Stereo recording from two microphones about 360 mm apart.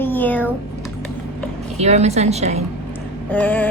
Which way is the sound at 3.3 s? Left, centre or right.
Centre.